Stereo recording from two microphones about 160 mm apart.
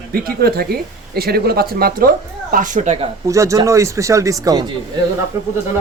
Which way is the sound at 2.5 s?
55° right (ahead or behind).